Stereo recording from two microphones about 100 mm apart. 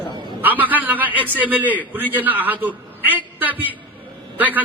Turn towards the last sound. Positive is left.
turn(degrees=-15)  # may be behind; listen again after turning